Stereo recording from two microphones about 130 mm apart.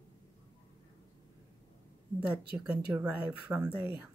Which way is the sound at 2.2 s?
15° right (ahead or behind).